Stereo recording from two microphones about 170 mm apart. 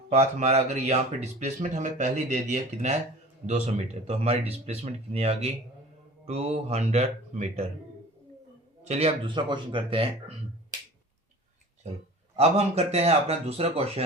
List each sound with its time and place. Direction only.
0.1 s speech: 40° right (ahead or behind)
8.8 s speech: 40° right (ahead or behind)
12.4 s speech: 40° right (ahead or behind)